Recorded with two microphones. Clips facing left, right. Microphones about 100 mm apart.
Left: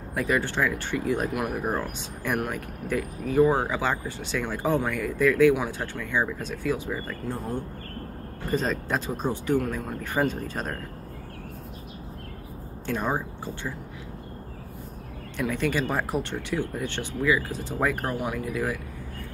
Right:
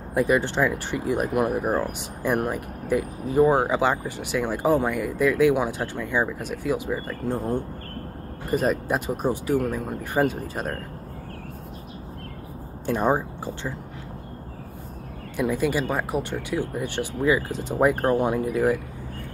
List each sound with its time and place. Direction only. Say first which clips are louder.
0.1 s speech: right 5 dB; 20° right (ahead or behind)
1.6 s speech: right 4 dB; 15° right (ahead or behind)
12.8 s speech: right 5 dB; 20° right (ahead or behind)
15.5 s speech: right 1 dB; 5° right (ahead or behind)
17.2 s speech: right 2 dB; 25° right (ahead or behind)
18.1 s speech: right 7 dB; 30° right (ahead or behind)